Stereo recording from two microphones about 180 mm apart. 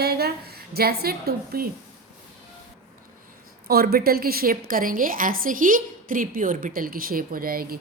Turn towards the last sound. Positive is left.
turn(degrees=-55)  # may be behind; listen again after turning